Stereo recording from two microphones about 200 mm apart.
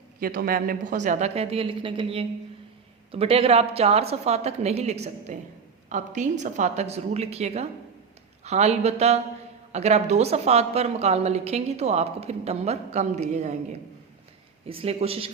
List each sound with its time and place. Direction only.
0.2 s a woman's voice: 45° right (ahead or behind)
14.7 s a man's voice: 30° right (ahead or behind)